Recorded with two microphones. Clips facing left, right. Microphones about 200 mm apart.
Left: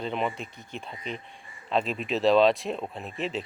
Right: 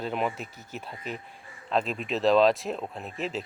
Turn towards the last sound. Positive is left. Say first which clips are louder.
# left 1 dB
turn(degrees=0)  # may be behind; listen again after turning